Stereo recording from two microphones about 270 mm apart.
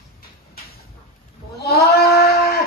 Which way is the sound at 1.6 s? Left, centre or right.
Left.